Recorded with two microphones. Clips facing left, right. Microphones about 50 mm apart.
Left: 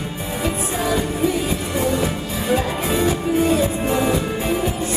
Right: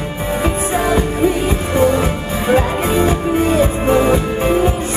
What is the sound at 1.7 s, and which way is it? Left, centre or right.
Music, right.